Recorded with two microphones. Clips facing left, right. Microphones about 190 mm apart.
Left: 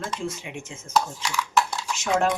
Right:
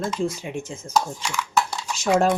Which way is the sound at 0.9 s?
Centre (ahead or behind).